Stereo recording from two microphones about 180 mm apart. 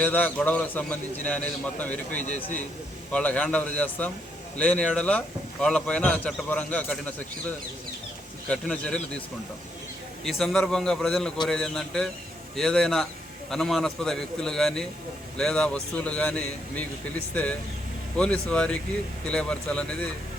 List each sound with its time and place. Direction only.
0.0 s speech: 10° left (ahead or behind)
2.2 s a man's voice: 40° left (ahead or behind)
3.1 s a man's voice: 5° left (ahead or behind)
8.4 s a man's voice: 5° left (ahead or behind)
10.2 s a man's voice: centre (ahead or behind)